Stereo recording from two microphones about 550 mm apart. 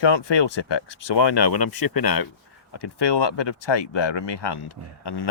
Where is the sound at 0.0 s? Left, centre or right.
Left.